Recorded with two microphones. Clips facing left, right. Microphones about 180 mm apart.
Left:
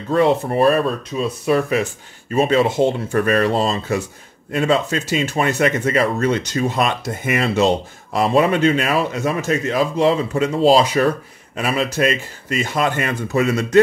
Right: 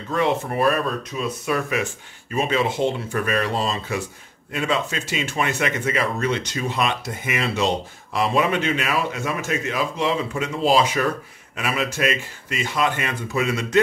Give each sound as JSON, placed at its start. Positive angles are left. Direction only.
{"t": 0.1, "sound": "speech", "side_deg": 35}